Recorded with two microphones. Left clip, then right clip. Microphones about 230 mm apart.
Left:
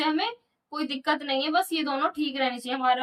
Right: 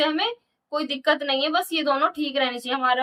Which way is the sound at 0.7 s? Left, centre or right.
Centre.